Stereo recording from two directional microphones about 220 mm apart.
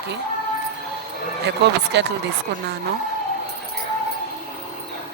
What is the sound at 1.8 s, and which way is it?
Speech, 50° right (ahead or behind).